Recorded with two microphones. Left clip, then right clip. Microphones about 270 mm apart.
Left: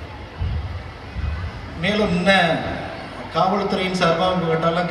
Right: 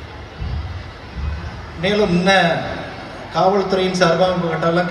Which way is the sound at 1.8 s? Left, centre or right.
Right.